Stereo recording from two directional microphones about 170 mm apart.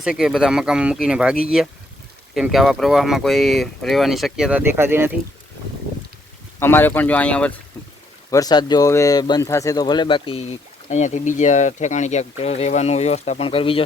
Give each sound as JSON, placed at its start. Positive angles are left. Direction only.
{"t": 0.0, "sound": "speech", "side_deg": -5}
{"t": 6.6, "sound": "speech", "side_deg": 15}
{"t": 8.3, "sound": "speech", "side_deg": 20}
{"t": 10.8, "sound": "speech", "side_deg": 45}